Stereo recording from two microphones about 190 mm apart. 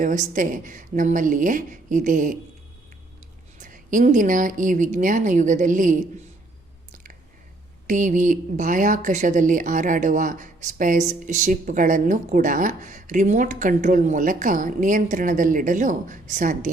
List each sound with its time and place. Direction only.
0.0 s a woman's voice: 40° right (ahead or behind)
3.6 s a woman's voice: 45° right (ahead or behind)
6.9 s chewing: 45° right (ahead or behind)
7.9 s a woman's voice: 40° right (ahead or behind)